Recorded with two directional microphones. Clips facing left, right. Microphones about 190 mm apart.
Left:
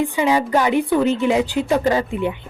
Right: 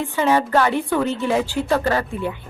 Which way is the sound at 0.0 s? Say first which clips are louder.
Left 1 dB; 15° left (ahead or behind).